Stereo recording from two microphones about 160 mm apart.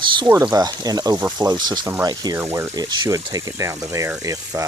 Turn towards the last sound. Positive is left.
turn(degrees=-20)  # may be behind; listen again after turning